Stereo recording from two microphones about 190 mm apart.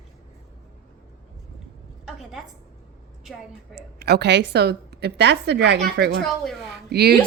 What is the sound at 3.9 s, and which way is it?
A woman's voice, 60° right (ahead or behind).